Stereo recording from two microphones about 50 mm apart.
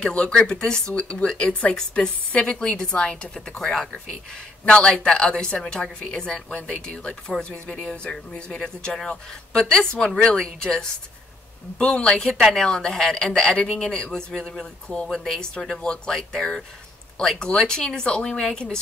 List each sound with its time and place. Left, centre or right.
0.0 s speech: left
4.6 s speech: left